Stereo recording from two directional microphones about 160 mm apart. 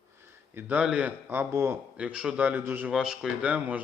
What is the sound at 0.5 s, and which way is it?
A man's voice, 10° right (ahead or behind).